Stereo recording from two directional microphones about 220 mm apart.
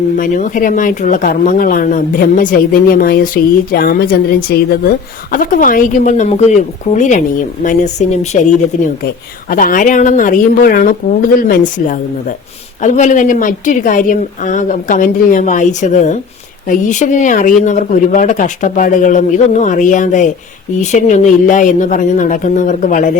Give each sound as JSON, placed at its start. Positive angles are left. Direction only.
{"t": 0.2, "sound": "speech", "side_deg": 35}